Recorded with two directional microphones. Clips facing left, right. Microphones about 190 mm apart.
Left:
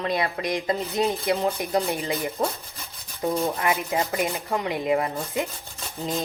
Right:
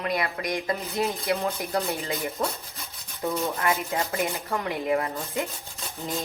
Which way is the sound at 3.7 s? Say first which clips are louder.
Left 2 dB; 20° left (ahead or behind).